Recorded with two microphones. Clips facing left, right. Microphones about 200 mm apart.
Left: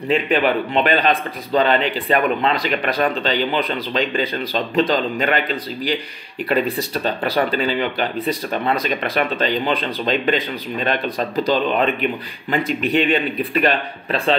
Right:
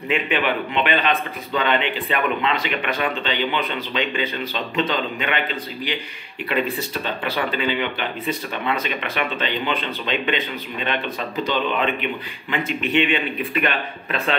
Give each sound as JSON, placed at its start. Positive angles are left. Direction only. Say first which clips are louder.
{"t": 0.1, "sound": "speech", "louder": "left 5 dB", "side_deg": 35}
{"t": 7.2, "sound": "speech", "louder": "left 3 dB", "side_deg": 35}